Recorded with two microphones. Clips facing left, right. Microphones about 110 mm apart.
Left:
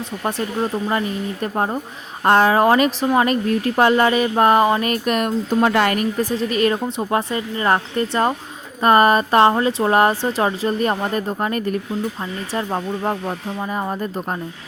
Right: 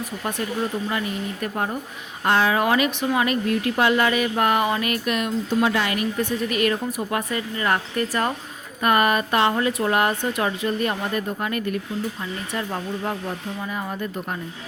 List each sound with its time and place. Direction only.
0.3 s speech: 30° left (ahead or behind)
6.3 s speech: 30° left (ahead or behind)